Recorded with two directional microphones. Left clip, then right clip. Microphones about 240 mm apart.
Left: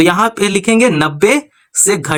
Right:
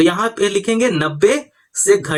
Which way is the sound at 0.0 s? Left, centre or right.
Left.